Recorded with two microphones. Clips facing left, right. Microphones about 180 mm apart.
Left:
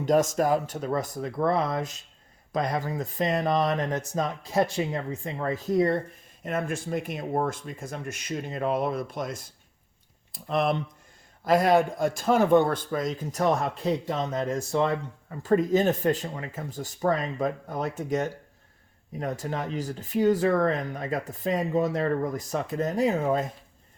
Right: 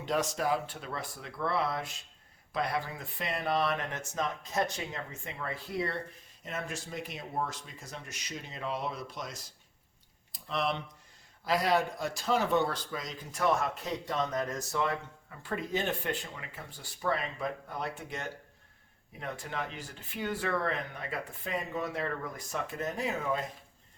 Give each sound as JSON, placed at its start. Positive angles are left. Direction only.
{"t": 0.0, "sound": "a man's voice", "side_deg": 45}